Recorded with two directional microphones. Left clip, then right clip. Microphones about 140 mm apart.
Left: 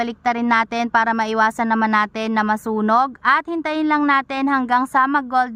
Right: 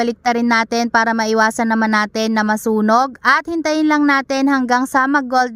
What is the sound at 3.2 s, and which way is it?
A woman's voice, 45° right (ahead or behind).